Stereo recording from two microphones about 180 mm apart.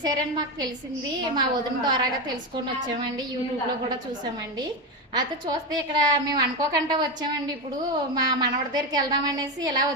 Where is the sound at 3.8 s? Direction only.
25° right (ahead or behind).